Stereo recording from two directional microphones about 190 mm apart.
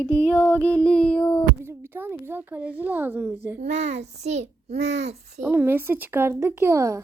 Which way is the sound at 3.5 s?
35° right (ahead or behind).